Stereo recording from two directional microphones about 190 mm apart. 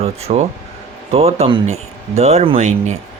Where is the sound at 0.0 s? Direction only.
35° right (ahead or behind).